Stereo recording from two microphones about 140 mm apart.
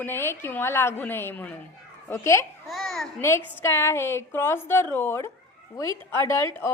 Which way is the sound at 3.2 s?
20° left (ahead or behind).